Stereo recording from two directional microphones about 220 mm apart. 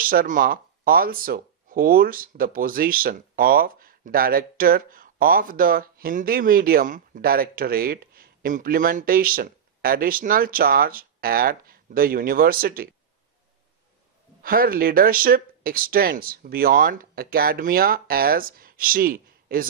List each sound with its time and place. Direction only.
0.0 s speech: 40° right (ahead or behind)
14.4 s speech: 40° right (ahead or behind)